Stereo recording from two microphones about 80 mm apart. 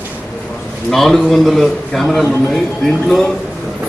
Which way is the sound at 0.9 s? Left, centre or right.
Centre.